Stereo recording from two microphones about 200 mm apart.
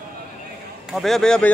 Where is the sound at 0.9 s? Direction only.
Centre (ahead or behind).